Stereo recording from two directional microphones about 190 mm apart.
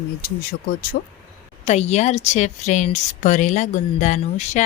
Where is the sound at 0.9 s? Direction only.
50° left (ahead or behind).